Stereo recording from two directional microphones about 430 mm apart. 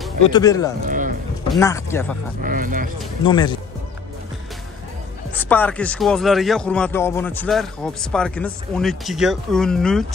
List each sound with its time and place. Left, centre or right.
0.0 s speech: centre
0.8 s music: centre
1.5 s a man's voice: centre
2.4 s speech: centre
3.3 s speech: centre
5.4 s a man's voice: centre